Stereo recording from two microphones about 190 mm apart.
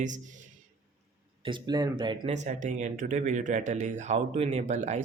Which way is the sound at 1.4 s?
25° right (ahead or behind).